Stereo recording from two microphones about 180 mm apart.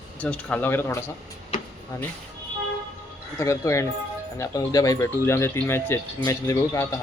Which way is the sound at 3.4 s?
15° left (ahead or behind).